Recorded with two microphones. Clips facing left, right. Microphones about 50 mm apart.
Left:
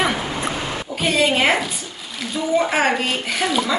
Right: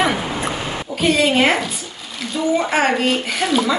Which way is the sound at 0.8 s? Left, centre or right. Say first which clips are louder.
Right 2 dB; centre.